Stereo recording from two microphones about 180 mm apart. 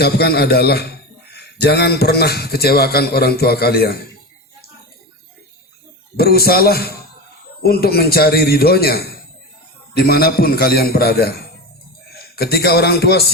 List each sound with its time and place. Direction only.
0.0 s a man's voice: 60° left (ahead or behind)
6.1 s a man's voice: 60° left (ahead or behind)